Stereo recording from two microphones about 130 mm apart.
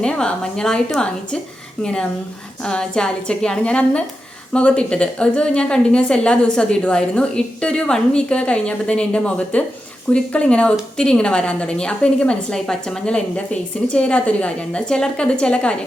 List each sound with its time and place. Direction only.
0.0 s a woman's voice: 5° left (ahead or behind)